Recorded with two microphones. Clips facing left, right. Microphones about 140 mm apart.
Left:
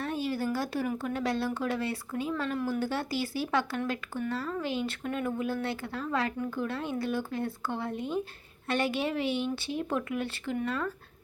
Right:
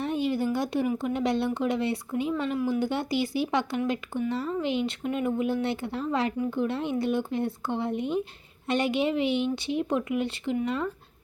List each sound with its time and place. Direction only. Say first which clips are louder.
0.0 s speech: right 4 dB; 20° right (ahead or behind)